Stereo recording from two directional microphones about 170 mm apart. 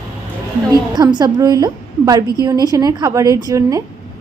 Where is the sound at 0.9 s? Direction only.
25° right (ahead or behind).